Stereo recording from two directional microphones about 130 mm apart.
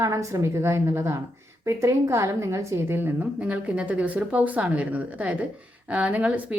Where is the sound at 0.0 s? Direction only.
25° right (ahead or behind).